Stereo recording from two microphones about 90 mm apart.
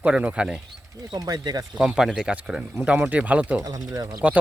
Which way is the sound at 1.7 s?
5° right (ahead or behind).